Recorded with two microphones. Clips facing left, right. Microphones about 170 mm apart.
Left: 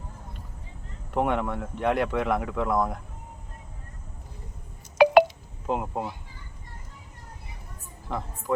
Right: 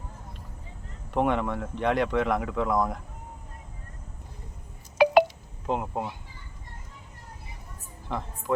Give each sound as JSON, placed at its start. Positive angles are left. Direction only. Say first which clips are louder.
{"t": 1.1, "sound": "speech", "louder": "even", "side_deg": 0}
{"t": 5.0, "sound": "telephone dialing", "louder": "left 3 dB", "side_deg": 65}
{"t": 5.6, "sound": "speech", "louder": "even", "side_deg": 5}
{"t": 8.0, "sound": "speech", "louder": "even", "side_deg": 0}